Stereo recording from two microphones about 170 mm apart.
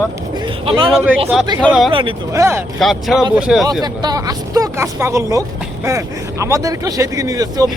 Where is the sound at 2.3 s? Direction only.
15° right (ahead or behind).